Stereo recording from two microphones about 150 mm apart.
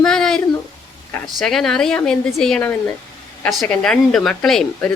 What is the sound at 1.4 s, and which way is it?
A woman's voice, 5° left (ahead or behind).